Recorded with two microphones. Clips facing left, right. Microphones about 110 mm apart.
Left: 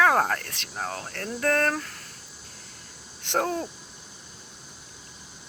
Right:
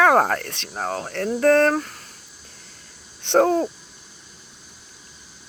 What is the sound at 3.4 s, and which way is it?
Speech, 50° right (ahead or behind).